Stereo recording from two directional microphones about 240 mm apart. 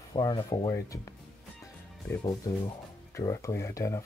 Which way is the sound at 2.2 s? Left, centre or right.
Centre.